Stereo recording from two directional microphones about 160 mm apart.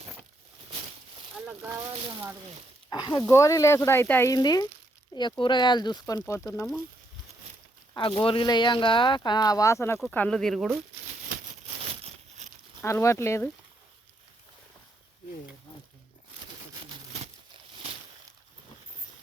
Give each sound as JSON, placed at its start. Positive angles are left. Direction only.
{"t": 1.5, "sound": "speech", "side_deg": -10}
{"t": 2.9, "sound": "speech", "side_deg": 25}
{"t": 7.9, "sound": "speech", "side_deg": 30}
{"t": 10.0, "sound": "speech", "side_deg": 5}
{"t": 12.8, "sound": "speech", "side_deg": 15}